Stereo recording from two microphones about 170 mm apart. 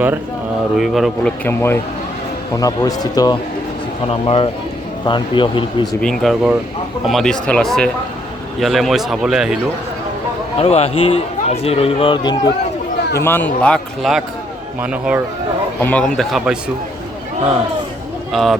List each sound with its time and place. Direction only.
0.8 s speech: centre (ahead or behind)
1.5 s speech: 15° left (ahead or behind)
4.1 s speech: 35° left (ahead or behind)
6.0 s speech: 5° left (ahead or behind)
10.6 s speech: 35° left (ahead or behind)
13.1 s speech: 15° left (ahead or behind); by 15.2 s 5° right (ahead or behind)
15.8 s speech: 10° left (ahead or behind)
18.3 s speech: centre (ahead or behind)